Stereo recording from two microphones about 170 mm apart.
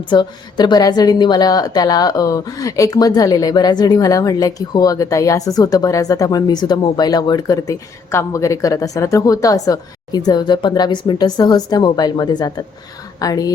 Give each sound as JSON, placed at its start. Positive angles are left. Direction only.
{"t": 0.1, "sound": "a woman's voice", "side_deg": 25}